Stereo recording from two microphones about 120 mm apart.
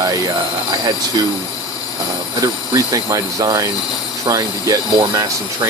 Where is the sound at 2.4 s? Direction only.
30° right (ahead or behind).